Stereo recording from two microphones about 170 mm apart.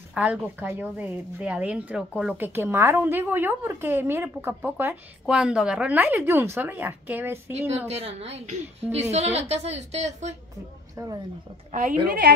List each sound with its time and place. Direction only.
0.1 s a woman's voice: 5° right (ahead or behind)
7.9 s a woman's voice: 35° right (ahead or behind)
11.0 s a woman's voice: 20° right (ahead or behind)
11.7 s a woman's voice: 50° right (ahead or behind)
12.1 s a woman's voice: 75° right (ahead or behind)